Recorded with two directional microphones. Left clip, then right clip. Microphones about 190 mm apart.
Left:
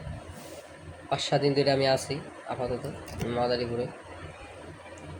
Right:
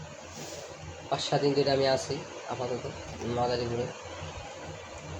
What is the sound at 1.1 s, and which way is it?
Speech, 10° left (ahead or behind).